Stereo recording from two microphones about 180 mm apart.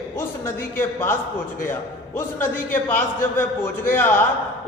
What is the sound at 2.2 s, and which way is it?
A man's voice, 10° left (ahead or behind).